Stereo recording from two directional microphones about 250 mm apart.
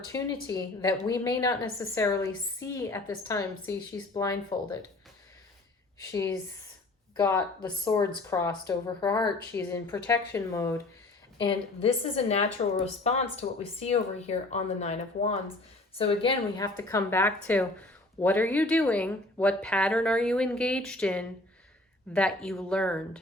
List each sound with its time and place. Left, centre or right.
0.1 s a woman's voice: centre
6.0 s a woman's voice: centre